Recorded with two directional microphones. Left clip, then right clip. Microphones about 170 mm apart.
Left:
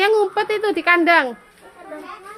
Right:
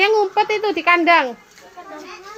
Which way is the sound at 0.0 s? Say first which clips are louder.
Right 1 dB; 10° left (ahead or behind).